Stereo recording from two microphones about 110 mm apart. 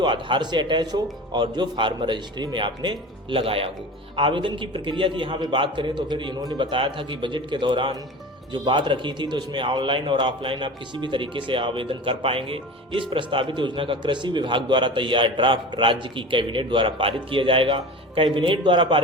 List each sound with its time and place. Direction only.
0.0 s a man's voice: 45° right (ahead or behind)
6.7 s a man's voice: 50° right (ahead or behind)